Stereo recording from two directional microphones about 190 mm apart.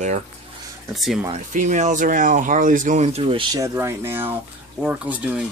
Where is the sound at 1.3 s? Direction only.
40° right (ahead or behind).